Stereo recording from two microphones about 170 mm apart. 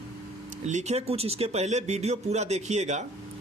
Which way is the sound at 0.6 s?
40° right (ahead or behind).